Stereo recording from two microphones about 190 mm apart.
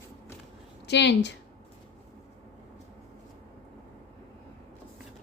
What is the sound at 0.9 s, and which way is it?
Speech, 65° left (ahead or behind).